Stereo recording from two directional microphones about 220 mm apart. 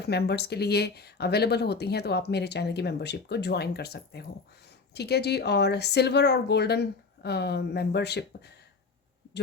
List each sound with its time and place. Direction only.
0.0 s speech: 50° left (ahead or behind)